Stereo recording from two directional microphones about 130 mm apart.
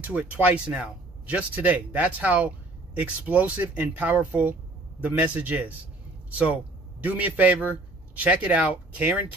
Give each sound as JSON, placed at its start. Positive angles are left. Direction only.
{"t": 0.0, "sound": "speech", "side_deg": -10}
{"t": 7.0, "sound": "speech", "side_deg": -10}